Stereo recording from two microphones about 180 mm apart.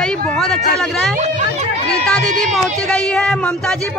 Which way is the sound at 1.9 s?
5° left (ahead or behind).